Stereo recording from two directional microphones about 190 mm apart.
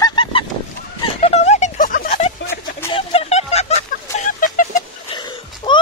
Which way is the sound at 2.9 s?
30° left (ahead or behind).